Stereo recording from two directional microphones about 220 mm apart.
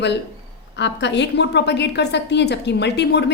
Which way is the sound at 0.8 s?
55° left (ahead or behind).